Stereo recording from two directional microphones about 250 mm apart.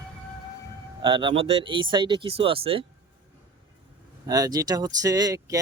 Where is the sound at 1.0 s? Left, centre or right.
Centre.